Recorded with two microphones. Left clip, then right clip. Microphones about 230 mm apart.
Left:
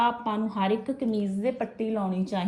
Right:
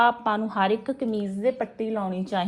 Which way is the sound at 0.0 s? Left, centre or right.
Right.